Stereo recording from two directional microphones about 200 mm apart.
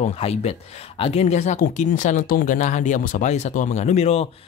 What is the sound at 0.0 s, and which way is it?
Speech, 30° left (ahead or behind).